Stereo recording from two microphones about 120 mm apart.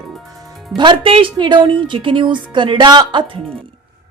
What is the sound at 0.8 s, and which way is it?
A woman's voice, 45° right (ahead or behind).